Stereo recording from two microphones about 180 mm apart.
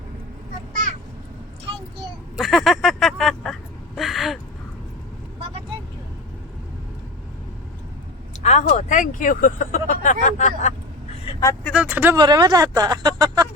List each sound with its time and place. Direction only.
0.7 s a sound: 45° right (ahead or behind)
2.3 s speech: centre (ahead or behind)
8.4 s speech: 40° left (ahead or behind)
11.6 s speech: 5° right (ahead or behind)
12.1 s speech: 25° right (ahead or behind)